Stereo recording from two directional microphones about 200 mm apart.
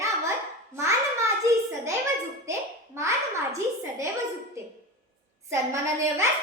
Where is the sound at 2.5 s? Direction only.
15° right (ahead or behind).